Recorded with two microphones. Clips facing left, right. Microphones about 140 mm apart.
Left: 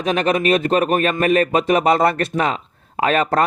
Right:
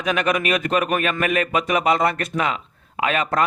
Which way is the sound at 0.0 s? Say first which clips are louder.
Left 3 dB; 30° left (ahead or behind).